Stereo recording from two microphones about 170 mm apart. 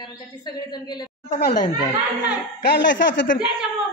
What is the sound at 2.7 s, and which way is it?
Speech, 90° left.